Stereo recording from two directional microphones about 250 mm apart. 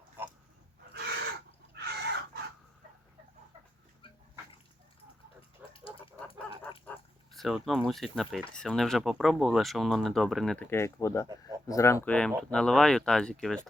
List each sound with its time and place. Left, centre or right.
0.2 s dog: centre
1.7 s chicken: right
5.7 s a sound: left
7.3 s speech: centre